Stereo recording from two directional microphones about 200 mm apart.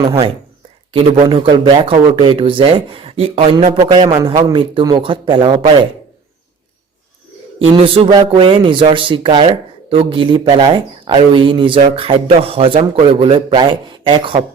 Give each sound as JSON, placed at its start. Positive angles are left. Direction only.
{"t": 0.0, "sound": "a man's voice", "side_deg": -20}
{"t": 7.6, "sound": "a man's voice", "side_deg": -30}